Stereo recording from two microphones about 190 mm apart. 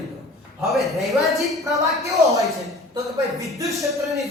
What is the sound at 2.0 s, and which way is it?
Speech, 15° right (ahead or behind).